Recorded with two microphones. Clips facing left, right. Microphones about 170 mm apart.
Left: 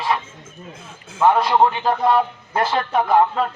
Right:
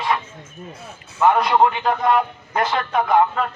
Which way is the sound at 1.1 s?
10° left (ahead or behind).